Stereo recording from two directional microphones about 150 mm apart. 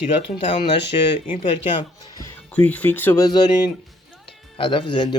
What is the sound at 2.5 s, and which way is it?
Speech, 10° left (ahead or behind).